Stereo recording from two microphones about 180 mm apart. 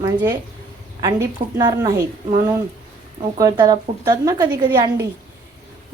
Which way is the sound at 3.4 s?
20° right (ahead or behind).